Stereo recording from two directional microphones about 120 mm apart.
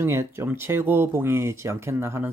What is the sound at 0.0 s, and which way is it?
Speech, 20° right (ahead or behind).